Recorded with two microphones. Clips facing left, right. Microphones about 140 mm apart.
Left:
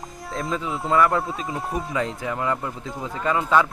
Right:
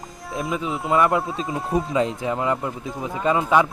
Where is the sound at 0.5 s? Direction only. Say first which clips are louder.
Even; 20° right (ahead or behind).